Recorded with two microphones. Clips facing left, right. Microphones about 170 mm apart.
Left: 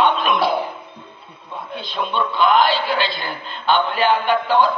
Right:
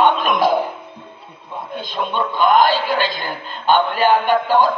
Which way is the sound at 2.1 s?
45° right (ahead or behind).